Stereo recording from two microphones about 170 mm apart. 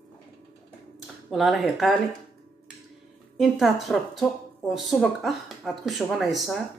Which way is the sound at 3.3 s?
Centre (ahead or behind).